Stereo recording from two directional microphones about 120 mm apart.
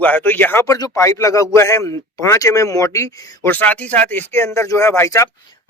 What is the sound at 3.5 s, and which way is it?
Speech, 15° left (ahead or behind).